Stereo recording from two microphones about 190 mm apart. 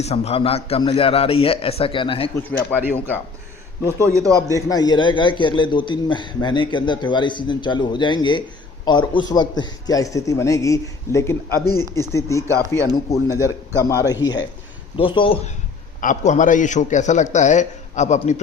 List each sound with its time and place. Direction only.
0.0 s a man's voice: 35° left (ahead or behind)
2.5 s a man's voice: 10° left (ahead or behind)
3.9 s a man's voice: 15° right (ahead or behind)
4.7 s a man's voice: 20° left (ahead or behind)
12.5 s a man's voice: 15° right (ahead or behind)
12.8 s a man's voice: 15° left (ahead or behind)
16.0 s a man's voice: 40° left (ahead or behind)